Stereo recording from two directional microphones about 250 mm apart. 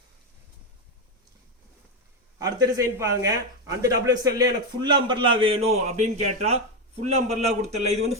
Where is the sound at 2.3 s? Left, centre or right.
Centre.